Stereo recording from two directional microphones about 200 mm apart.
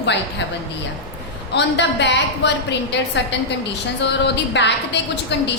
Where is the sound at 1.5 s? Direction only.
60° left (ahead or behind).